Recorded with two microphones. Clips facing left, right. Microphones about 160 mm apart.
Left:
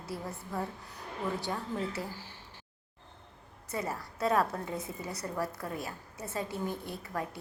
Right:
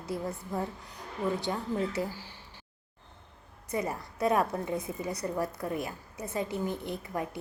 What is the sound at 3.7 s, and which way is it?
A woman's voice, 15° right (ahead or behind).